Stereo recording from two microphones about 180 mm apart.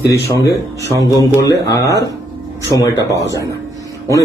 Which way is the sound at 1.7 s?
20° left (ahead or behind).